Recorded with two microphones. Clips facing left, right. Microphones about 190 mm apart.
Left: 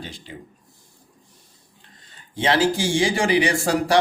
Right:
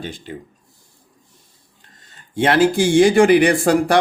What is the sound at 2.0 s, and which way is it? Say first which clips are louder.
Speech: right 8 dB; 50° right (ahead or behind).